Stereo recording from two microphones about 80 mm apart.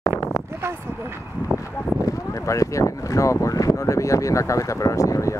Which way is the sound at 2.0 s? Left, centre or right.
Left.